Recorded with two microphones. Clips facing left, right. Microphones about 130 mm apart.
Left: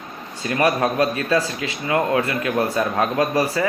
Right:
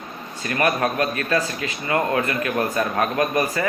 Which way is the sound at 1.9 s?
10° left (ahead or behind).